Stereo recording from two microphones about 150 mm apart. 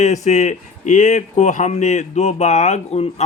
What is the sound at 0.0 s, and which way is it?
Speech, 50° left (ahead or behind).